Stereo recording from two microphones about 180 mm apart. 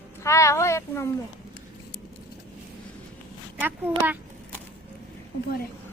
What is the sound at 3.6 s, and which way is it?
Speech, 10° right (ahead or behind).